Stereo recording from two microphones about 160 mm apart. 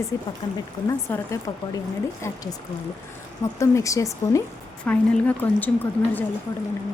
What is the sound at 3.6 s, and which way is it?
Speech, 20° left (ahead or behind).